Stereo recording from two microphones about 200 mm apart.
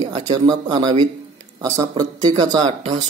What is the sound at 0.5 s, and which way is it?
Speech, 20° right (ahead or behind).